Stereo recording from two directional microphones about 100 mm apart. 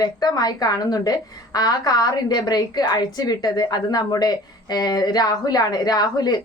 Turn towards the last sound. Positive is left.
turn(degrees=45)  # may be behind; listen again after turning